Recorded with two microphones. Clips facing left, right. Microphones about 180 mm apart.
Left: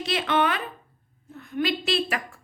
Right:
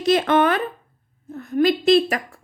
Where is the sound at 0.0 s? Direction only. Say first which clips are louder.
Right 7 dB; 45° right (ahead or behind).